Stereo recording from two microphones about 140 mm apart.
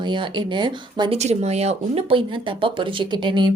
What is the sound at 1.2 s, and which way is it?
A woman's voice, 50° right (ahead or behind).